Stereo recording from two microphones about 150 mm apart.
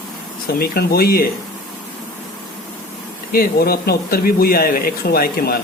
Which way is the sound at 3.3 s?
85° left.